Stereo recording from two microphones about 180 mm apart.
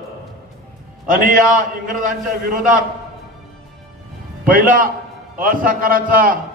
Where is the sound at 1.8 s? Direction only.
50° right (ahead or behind).